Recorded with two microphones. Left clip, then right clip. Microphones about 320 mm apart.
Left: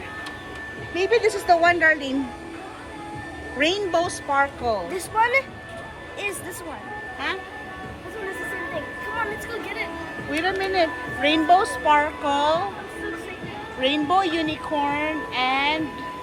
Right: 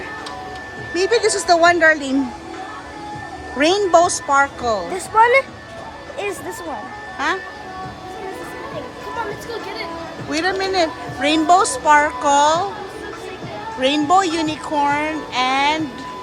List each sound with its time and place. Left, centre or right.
1.1 s speech: centre
3.6 s speech: centre
4.9 s speech: right
10.3 s speech: centre
13.8 s speech: centre